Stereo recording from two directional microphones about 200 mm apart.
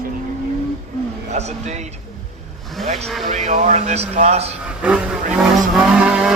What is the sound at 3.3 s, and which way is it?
A man's voice, 35° right (ahead or behind).